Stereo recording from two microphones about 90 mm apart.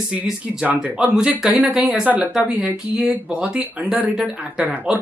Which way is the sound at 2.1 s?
15° right (ahead or behind).